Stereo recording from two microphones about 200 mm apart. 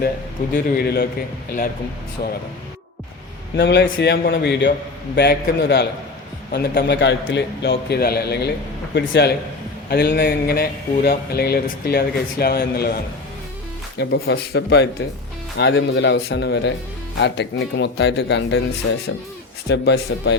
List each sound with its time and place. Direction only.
0.5 s speech: 50° left (ahead or behind)
2.2 s speech: 45° left (ahead or behind)
3.5 s a man's voice: 60° left (ahead or behind)
14.0 s a man's voice: 55° left (ahead or behind)
19.6 s a man's voice: 60° left (ahead or behind)